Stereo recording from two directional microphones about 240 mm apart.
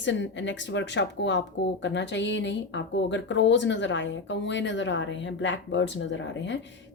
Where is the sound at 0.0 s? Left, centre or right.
Left.